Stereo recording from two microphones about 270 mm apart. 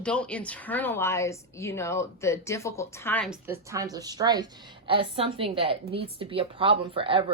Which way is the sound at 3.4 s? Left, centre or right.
Centre.